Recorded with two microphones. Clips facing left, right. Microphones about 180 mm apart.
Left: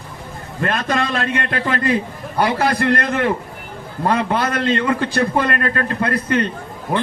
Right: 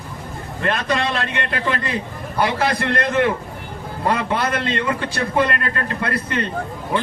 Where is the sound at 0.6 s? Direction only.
50° left (ahead or behind).